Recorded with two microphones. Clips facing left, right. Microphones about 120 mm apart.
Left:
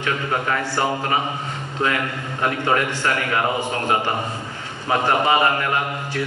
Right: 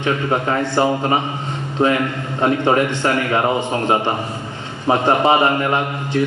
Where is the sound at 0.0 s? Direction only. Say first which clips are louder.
Right 5 dB; 25° right (ahead or behind).